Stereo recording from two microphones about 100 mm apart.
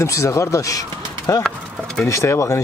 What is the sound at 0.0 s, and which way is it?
Speech, 30° left (ahead or behind).